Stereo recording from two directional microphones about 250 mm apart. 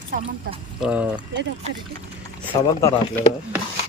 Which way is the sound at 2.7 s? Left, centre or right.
Centre.